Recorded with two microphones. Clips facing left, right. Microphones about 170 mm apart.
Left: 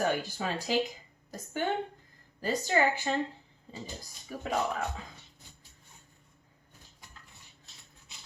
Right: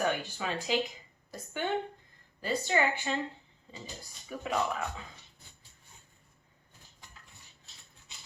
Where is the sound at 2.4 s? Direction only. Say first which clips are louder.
Left 2 dB; 40° left (ahead or behind).